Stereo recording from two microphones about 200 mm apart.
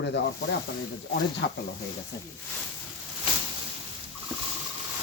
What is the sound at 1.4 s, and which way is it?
Speech, 60° left (ahead or behind).